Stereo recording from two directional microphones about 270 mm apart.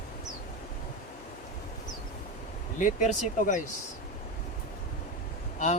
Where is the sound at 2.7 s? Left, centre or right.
Left.